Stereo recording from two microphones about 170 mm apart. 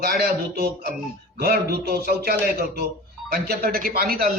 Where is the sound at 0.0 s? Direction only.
65° right (ahead or behind).